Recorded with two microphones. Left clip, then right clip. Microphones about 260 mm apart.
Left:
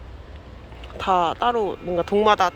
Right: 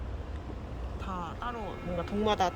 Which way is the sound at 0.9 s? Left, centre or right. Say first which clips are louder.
Left 19 dB; left.